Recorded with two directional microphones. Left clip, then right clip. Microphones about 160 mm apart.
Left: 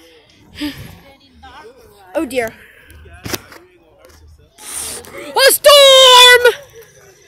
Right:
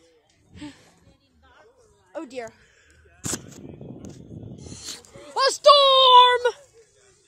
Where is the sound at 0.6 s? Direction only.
15° left (ahead or behind).